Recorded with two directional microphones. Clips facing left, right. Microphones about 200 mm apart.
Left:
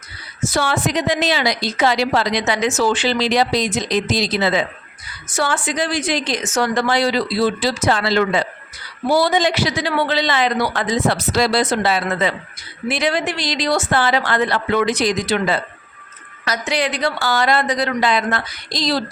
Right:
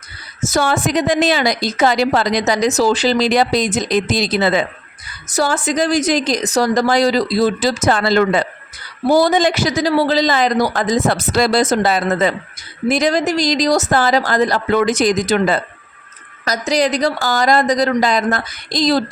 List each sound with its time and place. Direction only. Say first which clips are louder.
0.4 s a woman's voice: right 3 dB; 45° right (ahead or behind)
5.3 s a woman's voice: right 4 dB; 40° right (ahead or behind)